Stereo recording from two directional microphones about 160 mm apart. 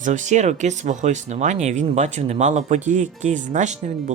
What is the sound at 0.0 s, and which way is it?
Speech, 50° right (ahead or behind).